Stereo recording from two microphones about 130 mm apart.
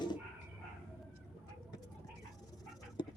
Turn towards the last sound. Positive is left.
turn(degrees=35)  # may be behind; listen again after turning